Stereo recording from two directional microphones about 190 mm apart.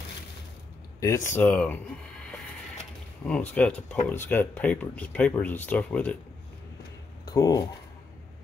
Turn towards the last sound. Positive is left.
turn(degrees=20)  # may be behind; listen again after turning